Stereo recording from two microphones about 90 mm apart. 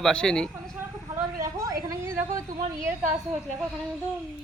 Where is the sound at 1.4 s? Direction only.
40° right (ahead or behind).